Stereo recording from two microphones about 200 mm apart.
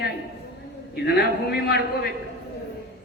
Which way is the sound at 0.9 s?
50° left (ahead or behind).